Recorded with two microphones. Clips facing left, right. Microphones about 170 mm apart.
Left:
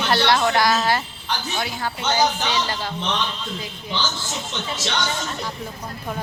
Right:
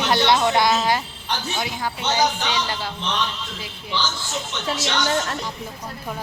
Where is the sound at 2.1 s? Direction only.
10° right (ahead or behind).